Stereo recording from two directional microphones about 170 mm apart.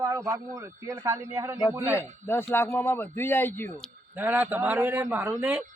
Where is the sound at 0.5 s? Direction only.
15° right (ahead or behind).